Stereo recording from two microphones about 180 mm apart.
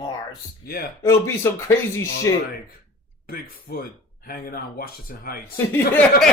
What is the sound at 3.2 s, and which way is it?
Speech, 55° left (ahead or behind).